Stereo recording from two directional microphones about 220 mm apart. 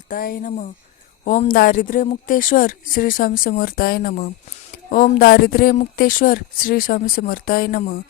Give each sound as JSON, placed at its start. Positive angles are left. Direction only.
{"t": 0.1, "sound": "a woman's voice", "side_deg": 40}